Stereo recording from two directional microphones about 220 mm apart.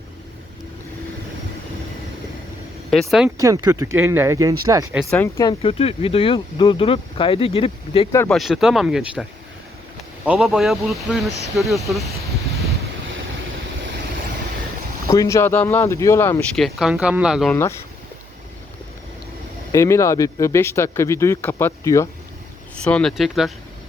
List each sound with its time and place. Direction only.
2.9 s speech: centre (ahead or behind)
3.3 s speech: 15° right (ahead or behind)
5.1 s speech: 10° left (ahead or behind)
5.5 s speech: 25° left (ahead or behind)
8.1 s speech: 10° left (ahead or behind)
8.4 s speech: centre (ahead or behind)
10.2 s speech: centre (ahead or behind)
15.0 s speech: 15° left (ahead or behind); by 17.5 s 5° right (ahead or behind)
17.5 s speech: 10° left (ahead or behind)
19.7 s speech: 15° left (ahead or behind)